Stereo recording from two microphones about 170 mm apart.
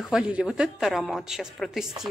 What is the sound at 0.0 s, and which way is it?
A man's voice, 5° right (ahead or behind).